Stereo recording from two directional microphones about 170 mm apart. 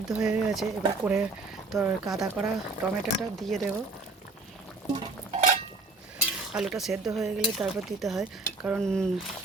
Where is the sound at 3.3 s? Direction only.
Centre (ahead or behind).